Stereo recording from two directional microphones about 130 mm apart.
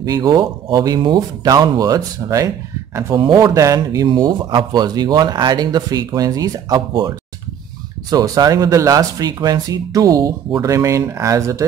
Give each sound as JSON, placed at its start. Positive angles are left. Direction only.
{"t": 0.0, "sound": "speech", "side_deg": -30}
{"t": 8.1, "sound": "speech", "side_deg": -30}